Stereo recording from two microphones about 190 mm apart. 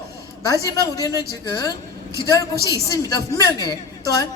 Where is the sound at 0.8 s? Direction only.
15° right (ahead or behind).